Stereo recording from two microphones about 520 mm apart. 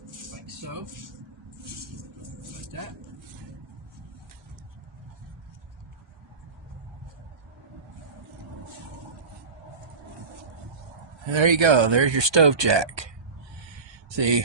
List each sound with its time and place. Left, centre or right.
0.1 s a sound: right
2.4 s vehicle: right
11.2 s speech: right
14.1 s speech: right